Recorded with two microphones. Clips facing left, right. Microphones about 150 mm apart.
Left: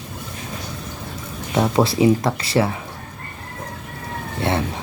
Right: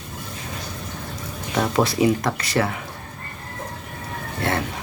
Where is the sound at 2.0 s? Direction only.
25° left (ahead or behind).